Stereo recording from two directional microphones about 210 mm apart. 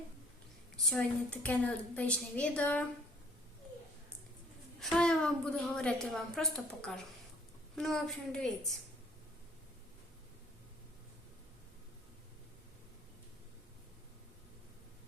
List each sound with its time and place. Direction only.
0.9 s a woman's voice: 5° left (ahead or behind)
4.8 s a woman's voice: 5° left (ahead or behind)